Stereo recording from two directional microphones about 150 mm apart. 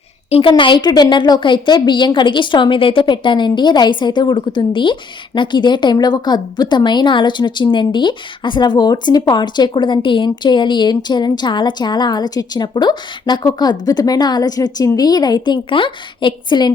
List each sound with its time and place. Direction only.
0.3 s a woman's voice: 40° left (ahead or behind)